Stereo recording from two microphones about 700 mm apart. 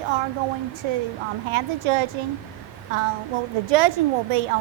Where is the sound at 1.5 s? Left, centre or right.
Right.